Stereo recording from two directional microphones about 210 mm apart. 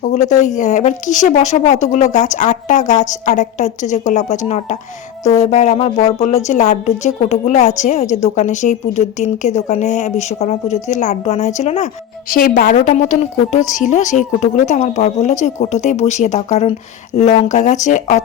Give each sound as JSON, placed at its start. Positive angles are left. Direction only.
{"t": 0.0, "sound": "a woman's voice", "side_deg": 35}